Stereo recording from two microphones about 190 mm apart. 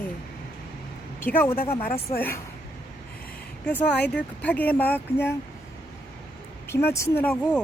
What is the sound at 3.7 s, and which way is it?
Speech, 5° left (ahead or behind).